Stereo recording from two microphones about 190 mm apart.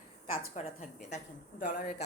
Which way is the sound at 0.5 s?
35° left (ahead or behind).